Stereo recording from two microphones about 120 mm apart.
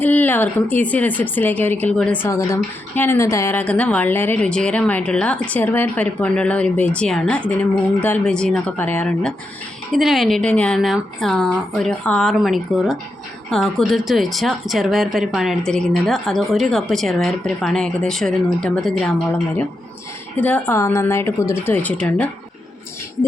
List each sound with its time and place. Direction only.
0.0 s a woman's voice: 15° left (ahead or behind)
2.2 s a woman's voice: 25° left (ahead or behind)
3.6 s a woman's voice: 10° left (ahead or behind)
9.9 s speech: centre (ahead or behind)
10.8 s speech: centre (ahead or behind)
20.4 s a woman's voice: 15° left (ahead or behind)